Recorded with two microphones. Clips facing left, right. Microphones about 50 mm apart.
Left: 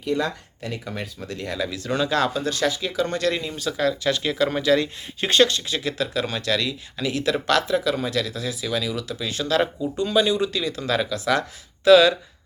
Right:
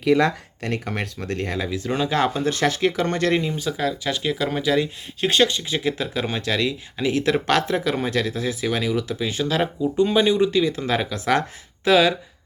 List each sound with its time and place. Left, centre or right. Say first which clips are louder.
0.0 s speech: right 6 dB; right
1.5 s speech: left 2 dB; centre
3.5 s speech: left 1 dB; centre; by 9.0 s right
9.0 s speech: right 4 dB; right
11.9 s speech: left 3 dB; centre